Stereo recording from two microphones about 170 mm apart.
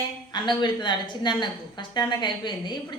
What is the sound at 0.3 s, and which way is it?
Speech, 25° left (ahead or behind).